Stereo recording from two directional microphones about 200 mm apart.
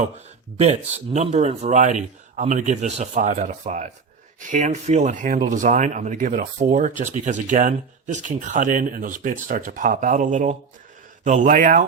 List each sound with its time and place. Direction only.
0.5 s speech: 30° right (ahead or behind)